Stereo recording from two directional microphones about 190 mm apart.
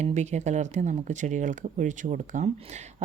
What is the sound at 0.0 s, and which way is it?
A woman's voice, 35° right (ahead or behind).